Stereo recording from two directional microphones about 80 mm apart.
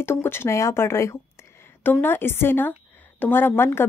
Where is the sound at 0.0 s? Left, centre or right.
Left.